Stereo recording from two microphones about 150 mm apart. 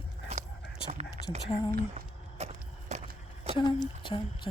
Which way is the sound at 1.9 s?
45° right (ahead or behind).